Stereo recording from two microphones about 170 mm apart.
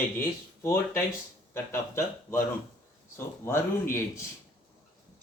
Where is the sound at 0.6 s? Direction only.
15° left (ahead or behind).